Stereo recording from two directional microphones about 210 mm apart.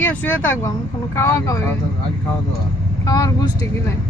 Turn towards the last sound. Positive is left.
turn(degrees=15)  # may be behind; listen again after turning